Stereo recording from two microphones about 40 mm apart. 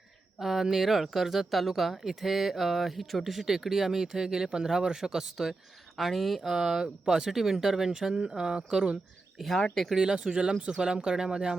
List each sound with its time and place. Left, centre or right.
0.3 s speech: centre
6.5 s speech: centre
9.4 s speech: centre
10.0 s speech: centre